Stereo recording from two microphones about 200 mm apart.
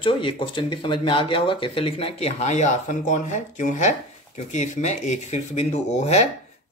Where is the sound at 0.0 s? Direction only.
25° left (ahead or behind).